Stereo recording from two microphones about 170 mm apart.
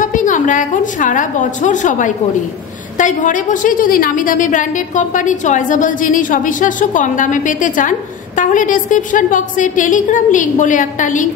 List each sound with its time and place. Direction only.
0.0 s a woman's voice: 50° left (ahead or behind)